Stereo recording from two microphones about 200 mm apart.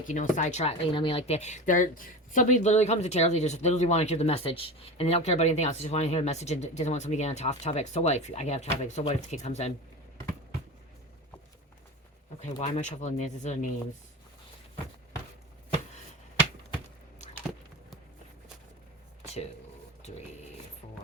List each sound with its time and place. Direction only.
0.0 s speech: 40° left (ahead or behind)
12.5 s speech: 35° left (ahead or behind)